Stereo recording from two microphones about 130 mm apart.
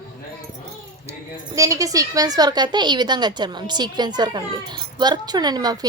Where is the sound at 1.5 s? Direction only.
25° right (ahead or behind).